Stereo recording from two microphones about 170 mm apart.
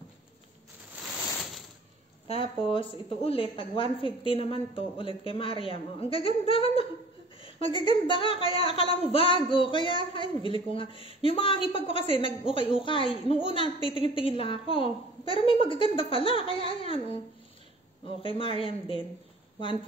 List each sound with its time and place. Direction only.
0.9 s a sound: centre (ahead or behind)
2.2 s a woman's voice: 35° left (ahead or behind)
18.2 s a woman's voice: 30° left (ahead or behind)